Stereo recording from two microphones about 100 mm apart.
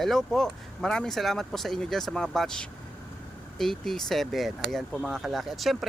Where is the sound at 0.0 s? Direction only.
5° left (ahead or behind).